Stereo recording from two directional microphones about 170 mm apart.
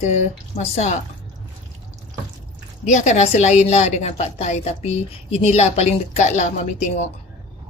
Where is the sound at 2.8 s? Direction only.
45° left (ahead or behind).